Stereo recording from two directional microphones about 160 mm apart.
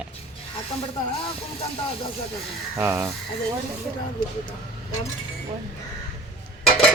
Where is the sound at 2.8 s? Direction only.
15° right (ahead or behind).